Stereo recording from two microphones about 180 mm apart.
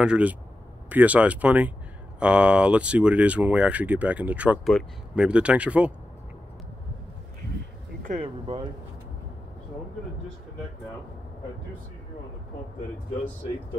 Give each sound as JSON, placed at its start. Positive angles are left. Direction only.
{"t": 0.0, "sound": "speech", "side_deg": -5}
{"t": 8.0, "sound": "speech", "side_deg": -35}